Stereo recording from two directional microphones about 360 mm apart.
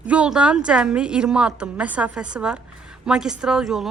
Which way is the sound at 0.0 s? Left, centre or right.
Centre.